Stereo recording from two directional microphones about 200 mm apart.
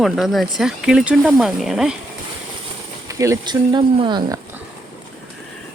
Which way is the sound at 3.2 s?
20° right (ahead or behind).